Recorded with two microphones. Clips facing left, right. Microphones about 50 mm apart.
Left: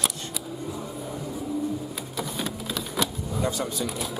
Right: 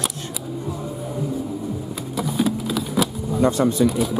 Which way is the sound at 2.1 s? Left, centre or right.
Centre.